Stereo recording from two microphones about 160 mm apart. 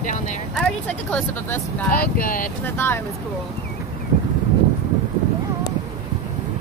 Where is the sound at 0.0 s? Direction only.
50° left (ahead or behind).